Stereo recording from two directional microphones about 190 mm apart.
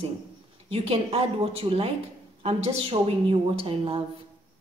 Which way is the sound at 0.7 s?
30° right (ahead or behind).